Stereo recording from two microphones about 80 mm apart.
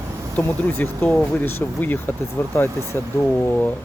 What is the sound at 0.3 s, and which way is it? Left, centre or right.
Speech, left.